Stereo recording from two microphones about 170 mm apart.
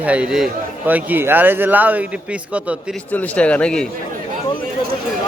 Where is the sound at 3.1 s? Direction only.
10° left (ahead or behind).